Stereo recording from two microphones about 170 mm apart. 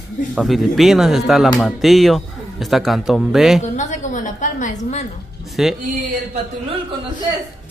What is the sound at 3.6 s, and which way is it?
A woman's voice, 45° left (ahead or behind).